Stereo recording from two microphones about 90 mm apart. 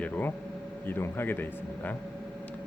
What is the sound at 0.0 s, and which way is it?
A man's voice, 20° left (ahead or behind).